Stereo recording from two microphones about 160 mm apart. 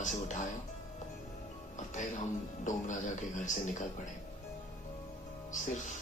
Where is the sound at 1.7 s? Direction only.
50° left (ahead or behind).